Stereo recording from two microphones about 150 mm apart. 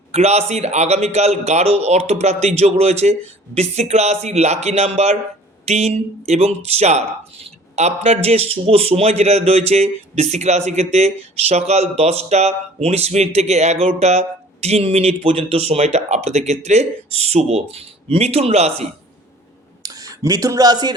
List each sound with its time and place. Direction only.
0.1 s speech: 45° right (ahead or behind)
19.8 s speech: 25° right (ahead or behind)